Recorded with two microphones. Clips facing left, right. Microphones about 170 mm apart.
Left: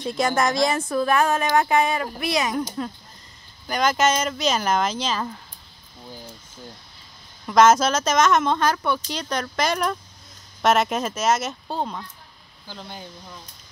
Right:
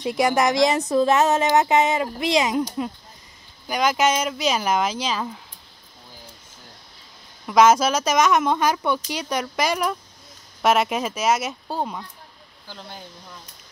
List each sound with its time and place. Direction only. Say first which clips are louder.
0.0 s speech: right 2 dB; 15° right (ahead or behind)
3.6 s speech: even; 10° right (ahead or behind)
7.4 s speech: even; 10° right (ahead or behind)